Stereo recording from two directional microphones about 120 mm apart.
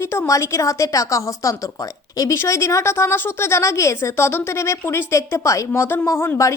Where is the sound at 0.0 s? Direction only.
20° left (ahead or behind).